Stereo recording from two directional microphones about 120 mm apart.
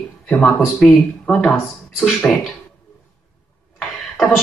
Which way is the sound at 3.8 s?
Centre (ahead or behind).